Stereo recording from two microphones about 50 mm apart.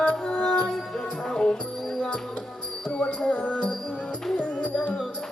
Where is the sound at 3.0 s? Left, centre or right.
Left.